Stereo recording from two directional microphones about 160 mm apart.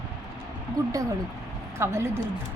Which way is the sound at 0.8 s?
20° right (ahead or behind).